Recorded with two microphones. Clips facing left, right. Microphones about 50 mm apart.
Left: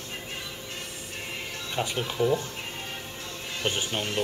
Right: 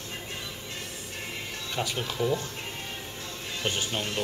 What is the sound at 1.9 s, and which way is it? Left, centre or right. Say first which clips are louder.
Speech: left 4 dB; centre.